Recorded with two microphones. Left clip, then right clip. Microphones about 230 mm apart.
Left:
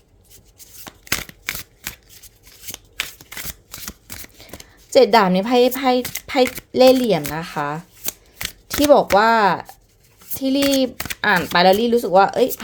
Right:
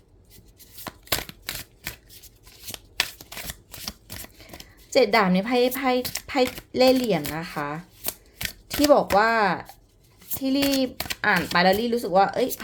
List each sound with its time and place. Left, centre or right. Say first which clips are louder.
4.9 s speech: left 6 dB; left
8.4 s chopping: left 2 dB; centre
8.8 s speech: left 5 dB; left